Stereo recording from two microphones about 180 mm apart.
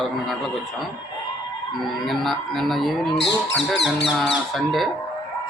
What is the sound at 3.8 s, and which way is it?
Speech, 5° right (ahead or behind).